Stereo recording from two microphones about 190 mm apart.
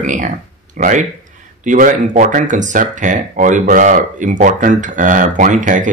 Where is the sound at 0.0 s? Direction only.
40° right (ahead or behind).